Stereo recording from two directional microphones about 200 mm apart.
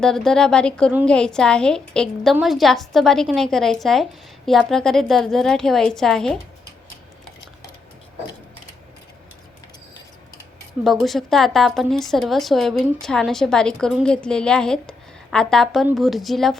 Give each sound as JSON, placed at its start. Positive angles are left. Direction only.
{"t": 0.0, "sound": "speech", "side_deg": 0}
{"t": 10.8, "sound": "speech", "side_deg": 0}